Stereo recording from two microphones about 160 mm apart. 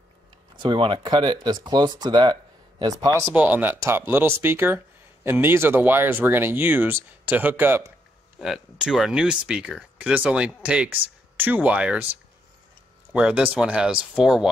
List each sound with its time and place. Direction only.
0.6 s speech: 30° right (ahead or behind)
3.3 s speech: 10° right (ahead or behind)
13.1 s speech: 5° right (ahead or behind)